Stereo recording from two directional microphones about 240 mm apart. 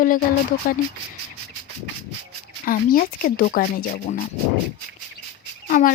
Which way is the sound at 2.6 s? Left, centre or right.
Left.